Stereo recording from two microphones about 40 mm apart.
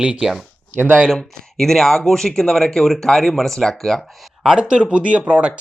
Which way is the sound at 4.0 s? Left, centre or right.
Centre.